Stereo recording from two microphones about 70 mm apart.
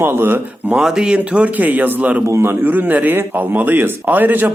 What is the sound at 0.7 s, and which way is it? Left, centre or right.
A man's voice, centre.